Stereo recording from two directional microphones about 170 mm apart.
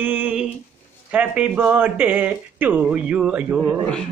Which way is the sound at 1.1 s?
5° right (ahead or behind).